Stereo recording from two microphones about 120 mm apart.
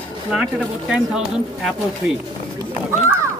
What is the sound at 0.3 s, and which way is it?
Speech, 5° right (ahead or behind).